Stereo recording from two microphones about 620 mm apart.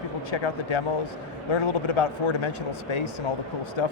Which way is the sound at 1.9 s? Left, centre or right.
Left.